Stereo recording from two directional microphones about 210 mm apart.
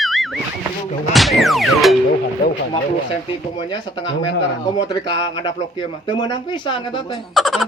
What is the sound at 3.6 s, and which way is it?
Speech, 20° left (ahead or behind).